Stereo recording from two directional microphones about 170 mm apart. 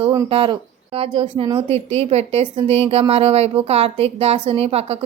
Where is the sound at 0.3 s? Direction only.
30° right (ahead or behind).